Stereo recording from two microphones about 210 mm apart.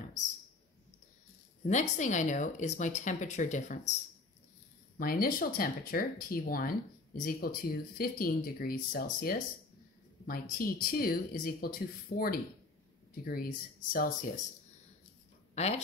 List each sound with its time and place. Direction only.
1.7 s speech: 35° left (ahead or behind)
4.9 s speech: 45° left (ahead or behind)
15.5 s speech: 30° left (ahead or behind)